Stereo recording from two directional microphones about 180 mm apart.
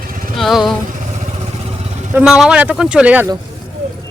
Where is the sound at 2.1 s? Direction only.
5° right (ahead or behind).